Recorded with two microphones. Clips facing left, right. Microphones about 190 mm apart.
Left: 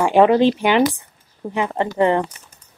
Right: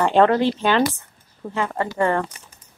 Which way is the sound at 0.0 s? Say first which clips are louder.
Left 3 dB; 15° left (ahead or behind).